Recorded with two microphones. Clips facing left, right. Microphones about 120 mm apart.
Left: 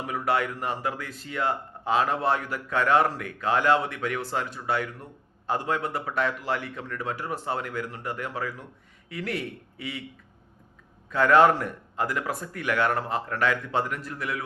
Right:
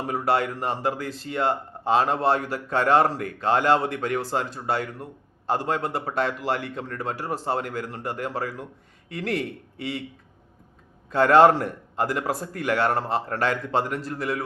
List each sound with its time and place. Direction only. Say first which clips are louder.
0.0 s speech: right 3 dB; 35° right (ahead or behind)
11.1 s speech: right 3 dB; 35° right (ahead or behind)